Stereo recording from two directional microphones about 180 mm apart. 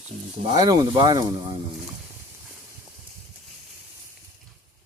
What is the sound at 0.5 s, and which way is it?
Speech, 20° right (ahead or behind).